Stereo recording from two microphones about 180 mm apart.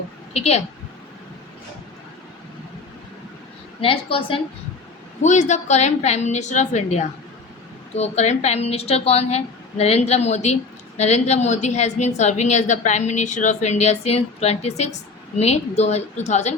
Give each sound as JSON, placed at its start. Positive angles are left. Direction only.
{"t": 0.3, "sound": "a woman's voice", "side_deg": 35}
{"t": 3.8, "sound": "a woman's voice", "side_deg": 30}
{"t": 5.2, "sound": "a woman's voice", "side_deg": 40}